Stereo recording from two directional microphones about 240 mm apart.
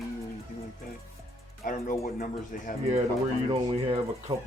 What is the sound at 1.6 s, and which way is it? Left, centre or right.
Speech, left.